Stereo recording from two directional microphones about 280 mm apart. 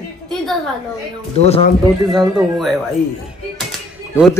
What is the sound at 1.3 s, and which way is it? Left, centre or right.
Speech, left.